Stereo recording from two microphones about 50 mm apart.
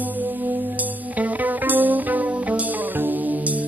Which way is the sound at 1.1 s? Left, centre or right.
Right.